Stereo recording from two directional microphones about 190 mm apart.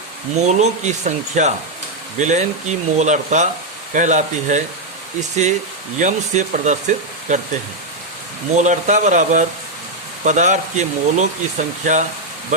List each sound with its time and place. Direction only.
0.3 s speech: 35° right (ahead or behind)
6.0 s speech: 40° right (ahead or behind)
8.5 s speech: 40° right (ahead or behind)